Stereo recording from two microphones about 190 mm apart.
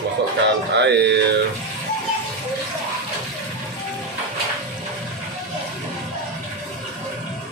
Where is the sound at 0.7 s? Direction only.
65° right (ahead or behind).